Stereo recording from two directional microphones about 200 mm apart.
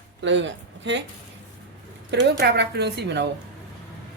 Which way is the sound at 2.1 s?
55° right (ahead or behind).